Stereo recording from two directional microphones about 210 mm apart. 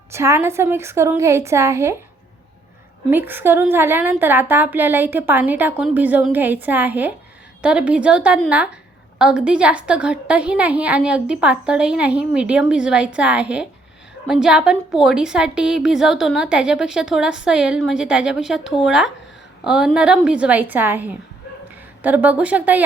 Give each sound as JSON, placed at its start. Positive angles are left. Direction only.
{"t": 0.1, "sound": "a woman's voice", "side_deg": -15}
{"t": 3.1, "sound": "a woman's voice", "side_deg": -10}